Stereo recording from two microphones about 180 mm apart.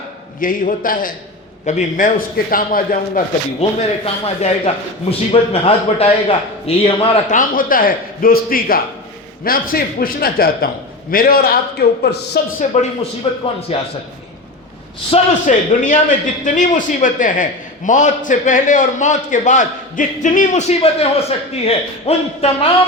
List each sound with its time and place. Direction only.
0.3 s a man's voice: 50° left (ahead or behind)
3.6 s a man's voice: 35° left (ahead or behind)
7.3 s a man's voice: 50° left (ahead or behind)
12.5 s a man's voice: 40° left (ahead or behind)
15.1 s a man's voice: 45° left (ahead or behind)